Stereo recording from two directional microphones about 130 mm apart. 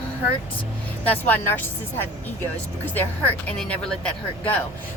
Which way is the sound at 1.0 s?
15° left (ahead or behind).